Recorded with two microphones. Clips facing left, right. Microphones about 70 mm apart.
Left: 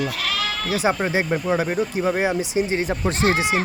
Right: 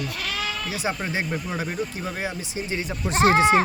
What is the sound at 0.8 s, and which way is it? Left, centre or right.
Speech, left.